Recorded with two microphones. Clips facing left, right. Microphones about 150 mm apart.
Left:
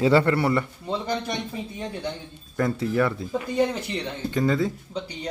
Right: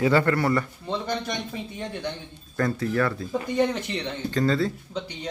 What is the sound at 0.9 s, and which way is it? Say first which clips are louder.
Speech: left 1 dB; 5° left (ahead or behind).